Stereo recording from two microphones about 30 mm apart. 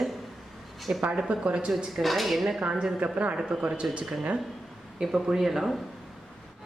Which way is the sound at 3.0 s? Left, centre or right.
Right.